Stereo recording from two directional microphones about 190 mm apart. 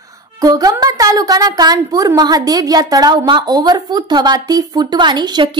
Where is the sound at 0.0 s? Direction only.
20° right (ahead or behind).